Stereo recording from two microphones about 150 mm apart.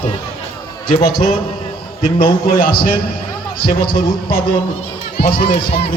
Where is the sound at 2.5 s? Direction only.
75° left (ahead or behind).